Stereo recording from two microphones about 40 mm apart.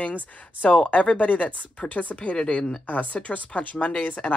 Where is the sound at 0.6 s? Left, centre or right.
Left.